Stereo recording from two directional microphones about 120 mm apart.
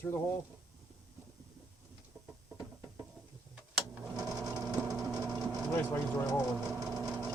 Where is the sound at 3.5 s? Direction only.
5° right (ahead or behind).